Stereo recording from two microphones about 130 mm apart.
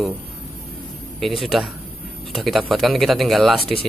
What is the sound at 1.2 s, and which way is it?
Speech, centre (ahead or behind).